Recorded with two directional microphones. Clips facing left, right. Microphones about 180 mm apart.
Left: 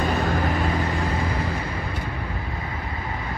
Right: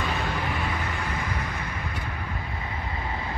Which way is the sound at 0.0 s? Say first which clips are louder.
Left 6 dB; 40° left (ahead or behind).